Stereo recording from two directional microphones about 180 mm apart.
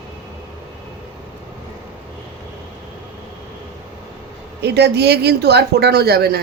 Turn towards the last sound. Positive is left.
turn(degrees=-60)  # may be behind; listen again after turning